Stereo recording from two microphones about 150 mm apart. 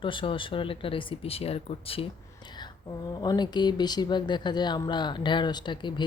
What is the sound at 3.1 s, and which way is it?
Speech, 25° left (ahead or behind).